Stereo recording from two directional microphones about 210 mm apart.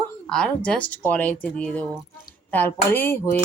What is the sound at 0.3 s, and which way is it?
Speech, 5° left (ahead or behind).